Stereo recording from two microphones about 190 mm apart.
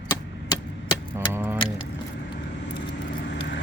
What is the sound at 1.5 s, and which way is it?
Mechanisms, 25° left (ahead or behind).